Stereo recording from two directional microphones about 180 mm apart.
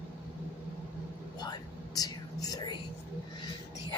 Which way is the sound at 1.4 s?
20° left (ahead or behind).